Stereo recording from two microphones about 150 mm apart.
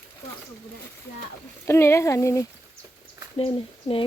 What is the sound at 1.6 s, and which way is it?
Speech, 15° left (ahead or behind).